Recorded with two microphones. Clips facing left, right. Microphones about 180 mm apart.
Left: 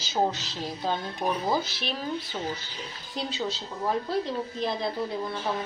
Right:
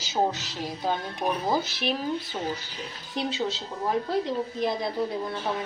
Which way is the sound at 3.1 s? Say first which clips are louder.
Right 3 dB; 20° right (ahead or behind).